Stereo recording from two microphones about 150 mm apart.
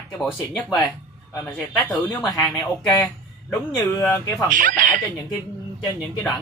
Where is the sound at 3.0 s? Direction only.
15° left (ahead or behind).